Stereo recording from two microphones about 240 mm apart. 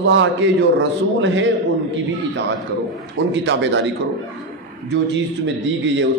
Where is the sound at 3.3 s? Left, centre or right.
Right.